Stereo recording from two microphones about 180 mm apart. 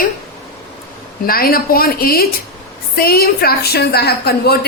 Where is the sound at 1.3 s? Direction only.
55° left (ahead or behind).